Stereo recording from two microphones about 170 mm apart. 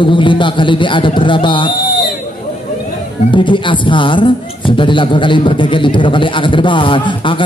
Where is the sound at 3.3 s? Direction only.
30° left (ahead or behind).